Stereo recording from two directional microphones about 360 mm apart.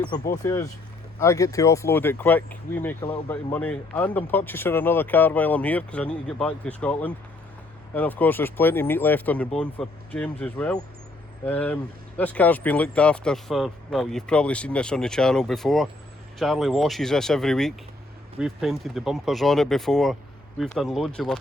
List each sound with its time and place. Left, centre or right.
0.0 s speech: centre